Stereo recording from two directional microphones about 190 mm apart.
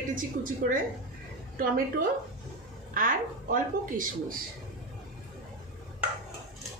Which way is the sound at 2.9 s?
45° right (ahead or behind).